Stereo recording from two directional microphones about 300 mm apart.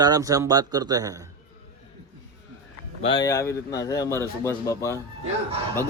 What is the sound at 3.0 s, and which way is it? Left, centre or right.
A man's voice, centre.